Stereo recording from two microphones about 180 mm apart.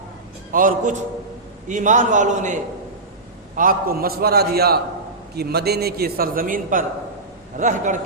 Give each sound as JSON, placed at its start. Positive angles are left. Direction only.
{"t": 0.5, "sound": "a man's voice", "side_deg": -50}